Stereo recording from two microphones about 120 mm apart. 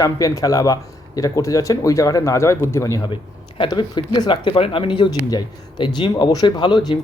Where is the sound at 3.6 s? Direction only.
40° left (ahead or behind).